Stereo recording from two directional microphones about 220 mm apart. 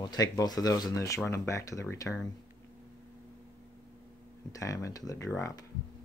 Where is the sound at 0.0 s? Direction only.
20° left (ahead or behind).